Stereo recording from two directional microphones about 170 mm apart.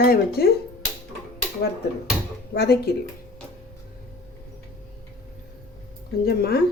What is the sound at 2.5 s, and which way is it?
Speech, 75° left (ahead or behind).